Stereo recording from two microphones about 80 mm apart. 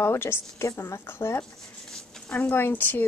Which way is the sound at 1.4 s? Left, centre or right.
Centre.